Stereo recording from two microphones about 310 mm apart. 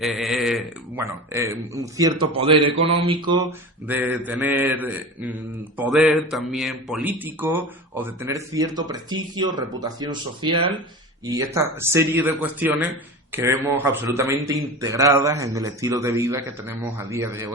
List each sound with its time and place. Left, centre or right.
0.0 s a man's voice: centre